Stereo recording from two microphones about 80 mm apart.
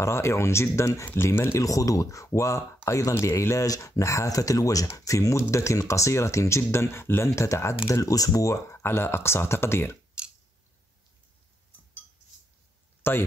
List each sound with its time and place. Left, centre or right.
0.0 s speech: left
8.8 s speech: left
13.0 s speech: left